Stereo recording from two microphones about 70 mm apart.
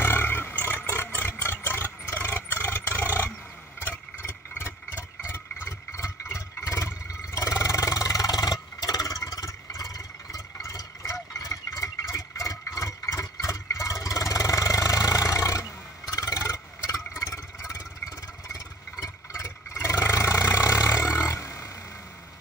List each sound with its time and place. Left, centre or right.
0.0 s roar: left
1.4 s vehicle: left
3.8 s vehicle: left
18.5 s vehicle: left